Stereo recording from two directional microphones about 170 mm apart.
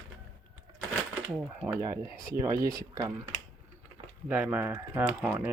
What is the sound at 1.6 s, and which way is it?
Speech, 10° right (ahead or behind).